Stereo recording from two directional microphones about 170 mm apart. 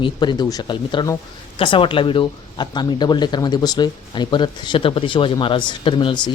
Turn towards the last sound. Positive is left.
turn(degrees=25)  # may be behind; listen again after turning